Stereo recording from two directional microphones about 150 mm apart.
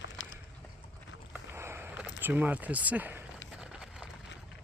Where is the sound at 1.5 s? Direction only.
15° right (ahead or behind).